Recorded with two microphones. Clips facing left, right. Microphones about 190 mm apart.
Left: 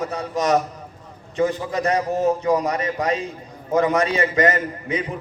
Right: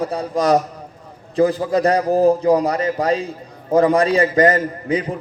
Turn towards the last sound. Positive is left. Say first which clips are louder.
# right 5 dB
turn(degrees=-35)  # may be behind; listen again after turning